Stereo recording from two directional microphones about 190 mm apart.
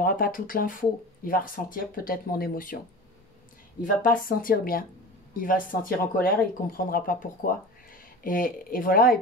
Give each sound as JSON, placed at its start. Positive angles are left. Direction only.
{"t": 0.0, "sound": "speech", "side_deg": 45}
{"t": 3.8, "sound": "speech", "side_deg": 45}